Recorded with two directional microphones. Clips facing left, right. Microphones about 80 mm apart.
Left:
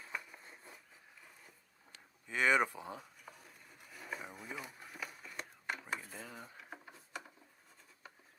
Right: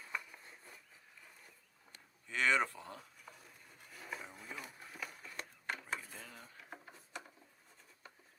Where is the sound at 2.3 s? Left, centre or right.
Centre.